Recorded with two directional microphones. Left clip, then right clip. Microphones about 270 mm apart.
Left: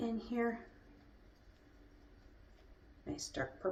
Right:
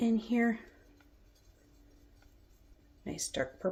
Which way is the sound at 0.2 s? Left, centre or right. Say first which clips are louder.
Right 6 dB; right.